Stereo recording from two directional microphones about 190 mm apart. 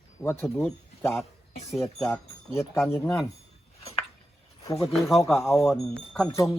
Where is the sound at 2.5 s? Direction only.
15° left (ahead or behind).